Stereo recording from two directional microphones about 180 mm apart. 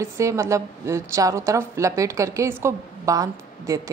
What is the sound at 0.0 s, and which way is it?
A woman's voice, 15° right (ahead or behind).